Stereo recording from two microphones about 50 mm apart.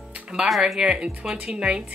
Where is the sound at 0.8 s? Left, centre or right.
Centre.